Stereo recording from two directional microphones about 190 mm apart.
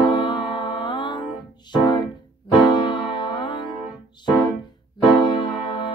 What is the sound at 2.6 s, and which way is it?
Music, 25° left (ahead or behind).